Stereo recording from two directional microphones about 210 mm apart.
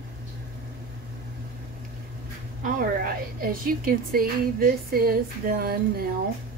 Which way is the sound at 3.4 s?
45° right (ahead or behind).